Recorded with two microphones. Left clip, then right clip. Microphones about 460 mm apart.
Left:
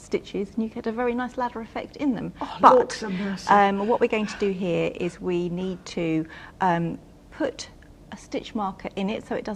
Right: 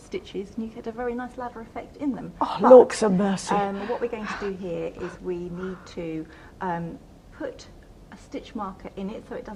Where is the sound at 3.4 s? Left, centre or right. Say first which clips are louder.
Left 7 dB; left.